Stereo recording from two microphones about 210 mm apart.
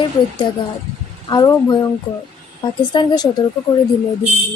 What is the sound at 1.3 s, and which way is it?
Speech, 15° left (ahead or behind).